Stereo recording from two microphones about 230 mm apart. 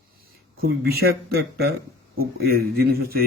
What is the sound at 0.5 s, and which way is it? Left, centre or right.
Speech, right.